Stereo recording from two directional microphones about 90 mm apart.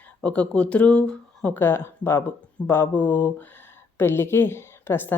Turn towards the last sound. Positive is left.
turn(degrees=25)  # may be behind; listen again after turning